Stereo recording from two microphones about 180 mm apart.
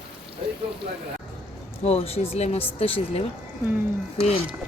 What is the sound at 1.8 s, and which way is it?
Speech, 35° left (ahead or behind).